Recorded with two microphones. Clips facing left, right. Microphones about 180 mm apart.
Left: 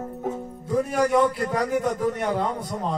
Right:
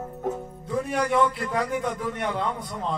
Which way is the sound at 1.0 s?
45° left (ahead or behind).